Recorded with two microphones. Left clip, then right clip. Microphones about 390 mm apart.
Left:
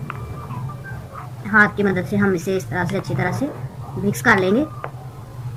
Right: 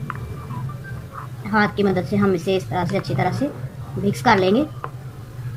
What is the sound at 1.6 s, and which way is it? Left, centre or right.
Speech, centre.